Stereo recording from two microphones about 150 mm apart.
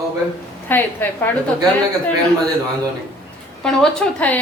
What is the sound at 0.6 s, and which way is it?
Speech, 15° left (ahead or behind).